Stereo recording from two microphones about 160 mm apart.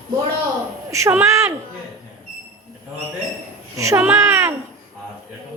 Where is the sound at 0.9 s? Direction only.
15° right (ahead or behind).